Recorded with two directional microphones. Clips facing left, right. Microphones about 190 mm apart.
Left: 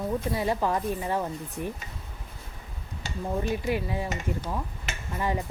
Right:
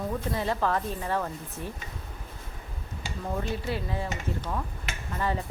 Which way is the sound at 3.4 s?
15° left (ahead or behind).